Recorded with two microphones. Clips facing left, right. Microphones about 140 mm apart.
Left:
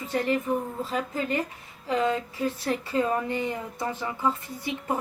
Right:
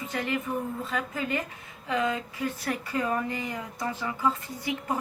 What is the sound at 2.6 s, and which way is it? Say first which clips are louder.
A woman's voice: left 3 dB; 25° left (ahead or behind).